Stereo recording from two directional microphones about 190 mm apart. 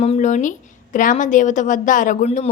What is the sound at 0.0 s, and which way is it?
A woman's voice, 35° left (ahead or behind).